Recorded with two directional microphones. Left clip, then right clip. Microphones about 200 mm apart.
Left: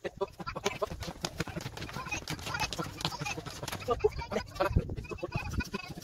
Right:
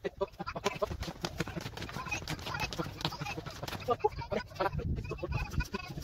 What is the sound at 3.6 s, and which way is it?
Bird, centre (ahead or behind).